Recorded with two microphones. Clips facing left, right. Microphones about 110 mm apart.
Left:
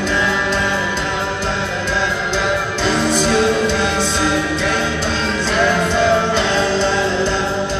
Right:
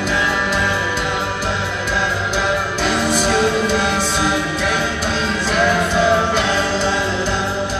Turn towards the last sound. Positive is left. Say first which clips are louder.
# left 2 dB
turn(degrees=-10)  # may be behind; listen again after turning